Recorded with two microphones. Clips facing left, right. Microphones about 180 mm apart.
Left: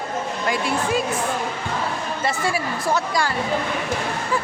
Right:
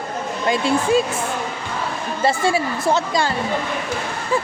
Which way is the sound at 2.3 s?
25° right (ahead or behind).